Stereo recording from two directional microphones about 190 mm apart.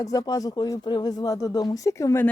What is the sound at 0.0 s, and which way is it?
Speech, 20° left (ahead or behind).